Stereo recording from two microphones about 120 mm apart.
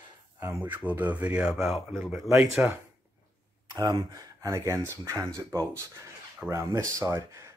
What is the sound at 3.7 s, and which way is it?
Speech, 35° right (ahead or behind).